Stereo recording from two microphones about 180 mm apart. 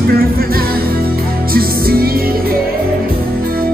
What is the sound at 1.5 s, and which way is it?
Music, 55° right (ahead or behind).